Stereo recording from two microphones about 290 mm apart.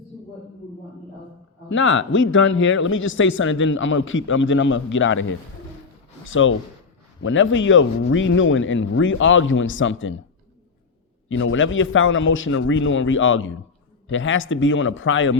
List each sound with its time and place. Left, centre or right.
1.7 s speech: left
6.2 s speech: left
11.3 s speech: left